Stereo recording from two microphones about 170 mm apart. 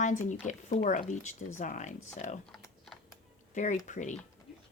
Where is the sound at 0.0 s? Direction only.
45° left (ahead or behind).